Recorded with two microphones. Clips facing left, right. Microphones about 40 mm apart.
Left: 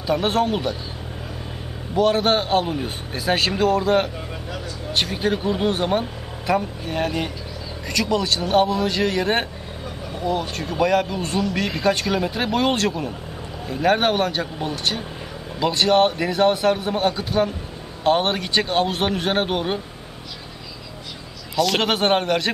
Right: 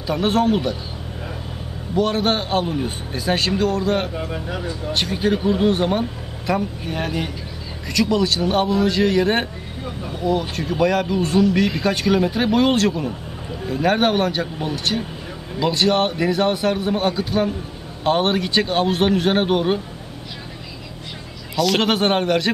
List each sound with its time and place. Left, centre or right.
0.0 s speech: centre
2.0 s speech: centre
4.3 s speech: centre
4.9 s speech: centre
10.5 s speech: centre
21.5 s speech: centre